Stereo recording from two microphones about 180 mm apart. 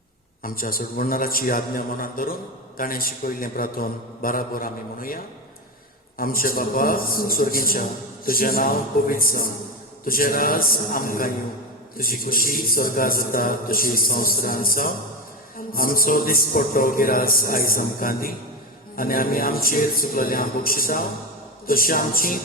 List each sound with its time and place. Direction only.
0.4 s a man's voice: 55° left (ahead or behind)